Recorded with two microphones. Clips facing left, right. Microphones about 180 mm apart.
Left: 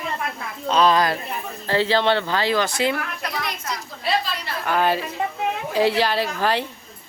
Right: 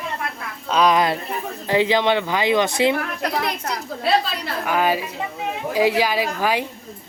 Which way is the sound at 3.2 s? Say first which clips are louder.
Right 5 dB; 60° right (ahead or behind).